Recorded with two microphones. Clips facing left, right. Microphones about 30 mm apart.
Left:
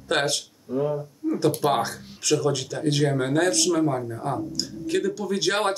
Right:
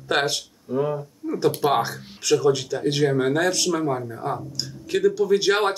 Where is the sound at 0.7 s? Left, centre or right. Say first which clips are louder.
Right 1 dB; right.